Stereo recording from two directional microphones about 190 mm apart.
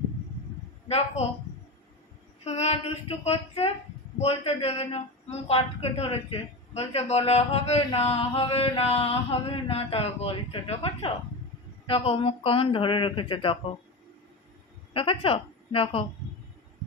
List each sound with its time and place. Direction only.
0.8 s a woman's voice: 35° left (ahead or behind)
2.4 s a woman's voice: 35° left (ahead or behind)
15.0 s speech: 30° left (ahead or behind)